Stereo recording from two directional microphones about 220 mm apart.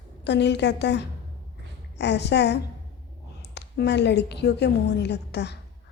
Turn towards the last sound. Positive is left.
turn(degrees=50)  # may be behind; listen again after turning